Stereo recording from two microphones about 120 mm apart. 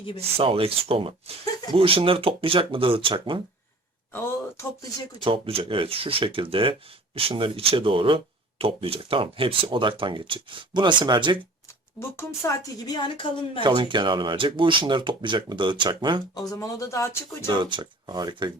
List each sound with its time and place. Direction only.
0.2 s speech: 55° right (ahead or behind)
4.1 s speech: 20° left (ahead or behind)
5.2 s speech: 50° right (ahead or behind)
11.9 s a woman's voice: 25° left (ahead or behind); by 13.6 s 40° left (ahead or behind)
13.6 s speech: 45° right (ahead or behind)
16.3 s speech: 30° left (ahead or behind)
17.5 s speech: 40° right (ahead or behind)